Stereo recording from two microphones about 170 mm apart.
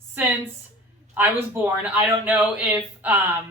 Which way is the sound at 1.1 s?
10° right (ahead or behind).